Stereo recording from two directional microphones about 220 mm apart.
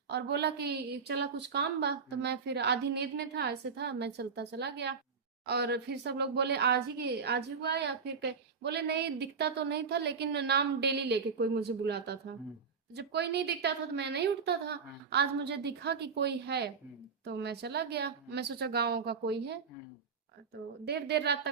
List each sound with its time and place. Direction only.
0.1 s a woman's voice: 50° right (ahead or behind)